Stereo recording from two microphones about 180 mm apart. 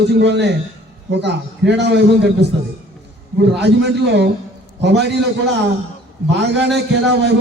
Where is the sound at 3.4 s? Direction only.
70° right (ahead or behind).